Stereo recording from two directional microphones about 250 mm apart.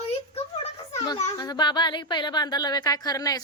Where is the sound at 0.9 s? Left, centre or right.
Centre.